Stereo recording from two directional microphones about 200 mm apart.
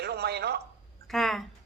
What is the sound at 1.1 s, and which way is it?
Speech, centre (ahead or behind).